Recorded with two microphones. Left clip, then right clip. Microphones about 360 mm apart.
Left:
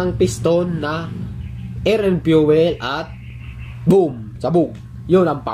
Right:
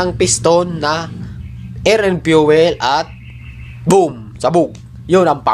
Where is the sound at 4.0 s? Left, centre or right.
Right.